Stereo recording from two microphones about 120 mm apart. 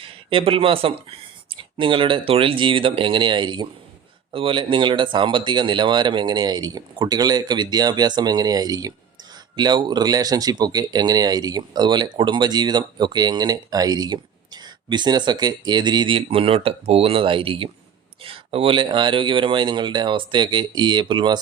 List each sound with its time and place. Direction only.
0.0 s speech: 50° right (ahead or behind)